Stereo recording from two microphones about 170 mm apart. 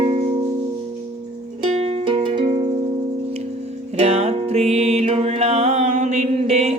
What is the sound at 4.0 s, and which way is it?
Music, 40° right (ahead or behind).